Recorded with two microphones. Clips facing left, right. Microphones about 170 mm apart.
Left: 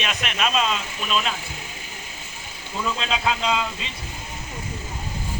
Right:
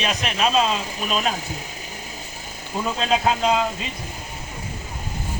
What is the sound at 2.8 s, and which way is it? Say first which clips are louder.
Speech: right 4 dB; 45° right (ahead or behind).